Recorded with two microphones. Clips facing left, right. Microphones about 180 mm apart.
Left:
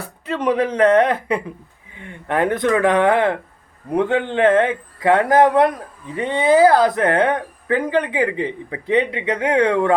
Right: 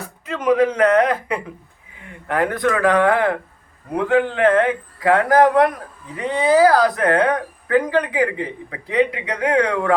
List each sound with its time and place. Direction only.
0.3 s a woman's voice: 30° left (ahead or behind)